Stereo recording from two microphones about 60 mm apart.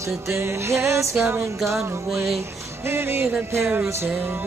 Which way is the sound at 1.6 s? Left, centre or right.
Right.